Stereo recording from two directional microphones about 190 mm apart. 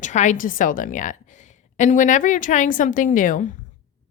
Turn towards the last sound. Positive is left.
turn(degrees=40)  # may be behind; listen again after turning